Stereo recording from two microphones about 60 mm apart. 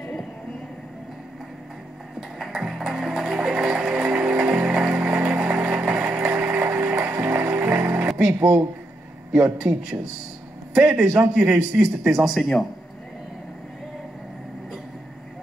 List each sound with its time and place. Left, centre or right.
2.1 s music: centre
6.4 s a sound: right
7.2 s music: right
8.2 s speech: right
9.6 s a man's voice: centre